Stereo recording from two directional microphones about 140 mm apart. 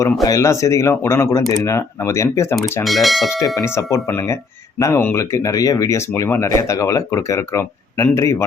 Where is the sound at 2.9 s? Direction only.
Centre (ahead or behind).